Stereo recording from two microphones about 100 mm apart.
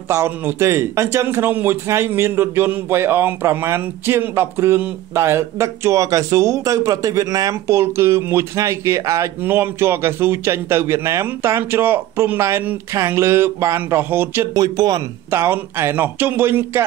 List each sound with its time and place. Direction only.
0.1 s a man's voice: 30° right (ahead or behind)
14.5 s speech: 40° right (ahead or behind)
15.3 s a man's voice: 25° right (ahead or behind)